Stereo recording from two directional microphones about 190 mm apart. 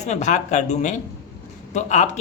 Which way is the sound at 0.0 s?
40° left (ahead or behind).